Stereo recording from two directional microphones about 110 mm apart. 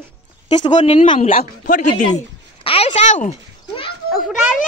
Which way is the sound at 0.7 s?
60° left (ahead or behind).